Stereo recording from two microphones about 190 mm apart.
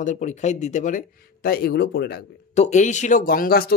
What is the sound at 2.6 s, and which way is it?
Speech, 40° left (ahead or behind).